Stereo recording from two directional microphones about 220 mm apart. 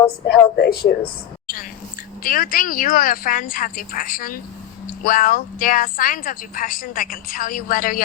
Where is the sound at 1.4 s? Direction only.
40° left (ahead or behind).